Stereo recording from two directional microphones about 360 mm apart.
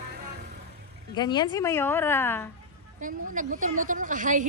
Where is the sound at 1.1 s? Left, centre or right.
Centre.